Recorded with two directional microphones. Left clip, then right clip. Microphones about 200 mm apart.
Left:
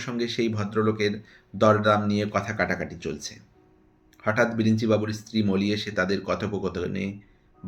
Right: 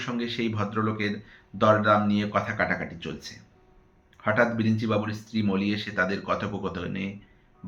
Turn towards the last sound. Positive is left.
turn(degrees=40)  # may be behind; listen again after turning